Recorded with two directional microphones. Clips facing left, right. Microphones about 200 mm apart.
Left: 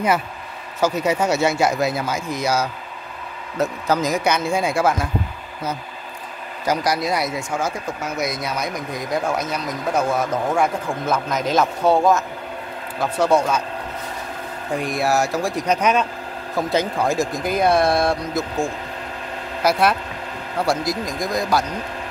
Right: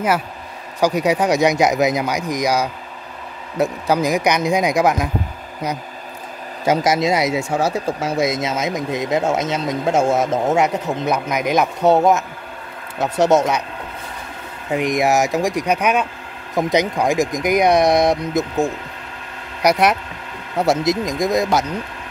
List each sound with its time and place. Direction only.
0.7 s speech: 15° right (ahead or behind)
6.6 s speech: 25° right (ahead or behind)
14.7 s speech: 20° right (ahead or behind)